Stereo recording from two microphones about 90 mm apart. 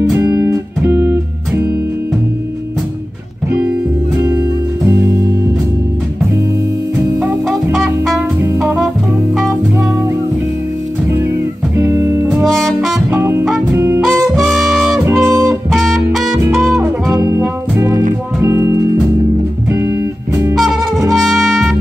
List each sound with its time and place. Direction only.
0.0 s music: 35° right (ahead or behind)
4.2 s music: 30° right (ahead or behind)
11.7 s music: 30° right (ahead or behind)
12.4 s saxophone: 5° left (ahead or behind)
13.1 s music: 25° right (ahead or behind)
14.2 s music: centre (ahead or behind)
15.0 s music: 30° right (ahead or behind)
15.7 s music: centre (ahead or behind)
16.3 s music: 25° right (ahead or behind)
18.4 s music: 35° right (ahead or behind)
21.1 s music: centre (ahead or behind)